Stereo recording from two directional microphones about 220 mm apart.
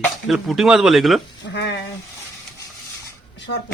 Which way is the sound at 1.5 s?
55° left (ahead or behind).